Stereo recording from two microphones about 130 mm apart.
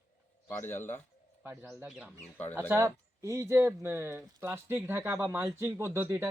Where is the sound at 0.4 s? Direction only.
15° left (ahead or behind).